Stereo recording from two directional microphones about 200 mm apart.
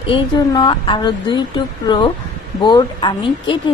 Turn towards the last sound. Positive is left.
turn(degrees=20)  # may be behind; listen again after turning